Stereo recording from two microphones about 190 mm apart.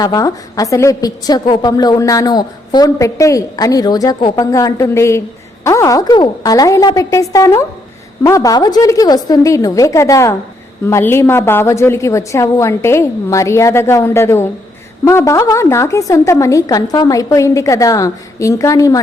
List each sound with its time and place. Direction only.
0.0 s a woman's voice: 20° left (ahead or behind)